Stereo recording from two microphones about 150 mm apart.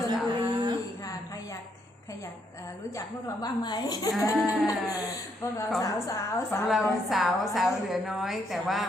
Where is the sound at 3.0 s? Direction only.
25° left (ahead or behind).